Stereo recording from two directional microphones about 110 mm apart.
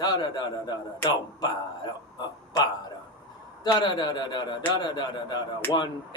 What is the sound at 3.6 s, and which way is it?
Speech, 40° left (ahead or behind).